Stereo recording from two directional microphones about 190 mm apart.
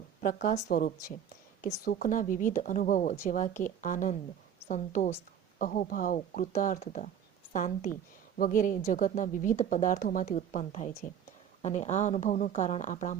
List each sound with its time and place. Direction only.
0.2 s speech: 45° left (ahead or behind)